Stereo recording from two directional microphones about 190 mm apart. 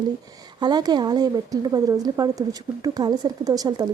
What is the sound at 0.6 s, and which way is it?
A woman's voice, 20° right (ahead or behind).